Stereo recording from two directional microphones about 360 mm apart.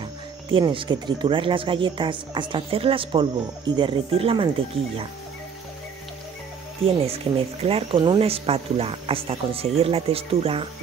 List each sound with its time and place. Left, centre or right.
0.5 s speech: centre
7.1 s speech: centre